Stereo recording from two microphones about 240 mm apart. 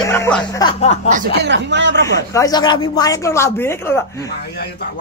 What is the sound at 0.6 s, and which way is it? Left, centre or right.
Speech, left.